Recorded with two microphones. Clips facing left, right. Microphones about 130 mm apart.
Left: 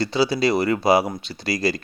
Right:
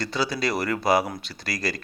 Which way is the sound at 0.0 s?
30° left (ahead or behind).